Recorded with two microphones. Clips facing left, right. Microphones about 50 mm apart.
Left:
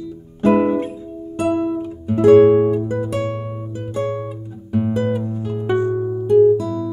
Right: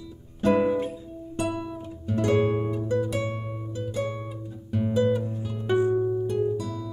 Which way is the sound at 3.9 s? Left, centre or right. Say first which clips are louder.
Left 9 dB; left.